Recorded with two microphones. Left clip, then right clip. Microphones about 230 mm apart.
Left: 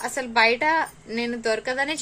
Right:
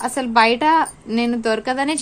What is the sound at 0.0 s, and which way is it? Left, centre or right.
A woman's voice, right.